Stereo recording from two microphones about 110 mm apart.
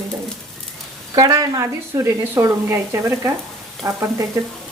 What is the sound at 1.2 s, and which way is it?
Speech, 35° right (ahead or behind).